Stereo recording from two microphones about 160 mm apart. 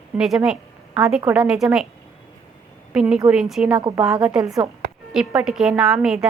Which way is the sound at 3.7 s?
20° right (ahead or behind).